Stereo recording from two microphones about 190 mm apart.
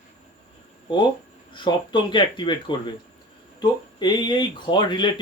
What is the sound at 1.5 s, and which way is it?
Speech, 25° left (ahead or behind).